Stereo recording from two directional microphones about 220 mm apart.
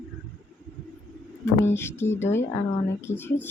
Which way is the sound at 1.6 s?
10° left (ahead or behind).